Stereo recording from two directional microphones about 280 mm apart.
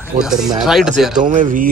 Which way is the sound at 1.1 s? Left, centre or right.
Right.